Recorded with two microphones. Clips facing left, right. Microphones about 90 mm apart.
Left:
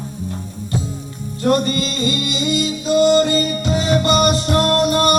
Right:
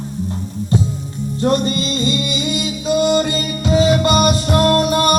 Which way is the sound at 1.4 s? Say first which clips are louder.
Even; 25° right (ahead or behind).